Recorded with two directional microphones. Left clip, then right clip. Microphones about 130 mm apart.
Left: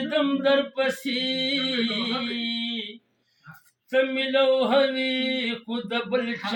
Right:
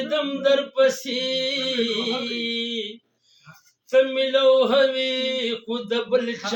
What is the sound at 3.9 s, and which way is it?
Speech, 35° right (ahead or behind).